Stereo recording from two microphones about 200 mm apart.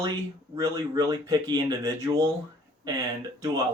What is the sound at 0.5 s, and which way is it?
Speech, 20° right (ahead or behind).